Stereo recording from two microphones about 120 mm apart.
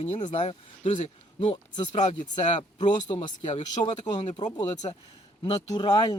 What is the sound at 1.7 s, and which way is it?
Speech, 75° left (ahead or behind).